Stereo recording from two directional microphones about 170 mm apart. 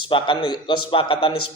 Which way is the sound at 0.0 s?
30° left (ahead or behind).